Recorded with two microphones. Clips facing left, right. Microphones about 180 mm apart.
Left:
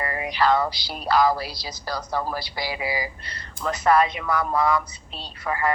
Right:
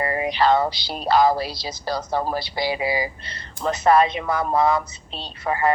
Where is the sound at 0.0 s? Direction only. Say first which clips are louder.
Right 3 dB; 25° right (ahead or behind).